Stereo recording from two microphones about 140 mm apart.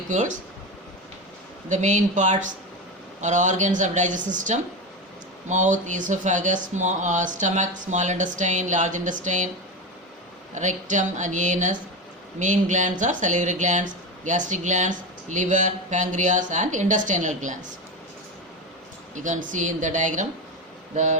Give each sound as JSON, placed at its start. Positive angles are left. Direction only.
{"t": 0.1, "sound": "speech", "side_deg": -60}
{"t": 1.7, "sound": "speech", "side_deg": -60}
{"t": 10.5, "sound": "speech", "side_deg": -60}
{"t": 19.1, "sound": "speech", "side_deg": -65}